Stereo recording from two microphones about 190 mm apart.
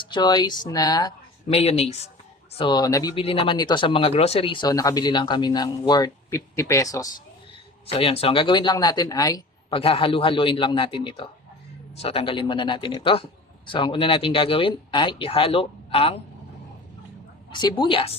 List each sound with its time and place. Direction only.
0.0 s speech: 25° left (ahead or behind)
1.5 s speech: 30° left (ahead or behind)
7.9 s speech: 30° left (ahead or behind)
17.5 s speech: 25° left (ahead or behind)